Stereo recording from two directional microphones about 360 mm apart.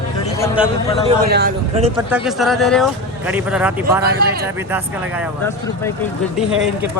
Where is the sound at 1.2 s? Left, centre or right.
Right.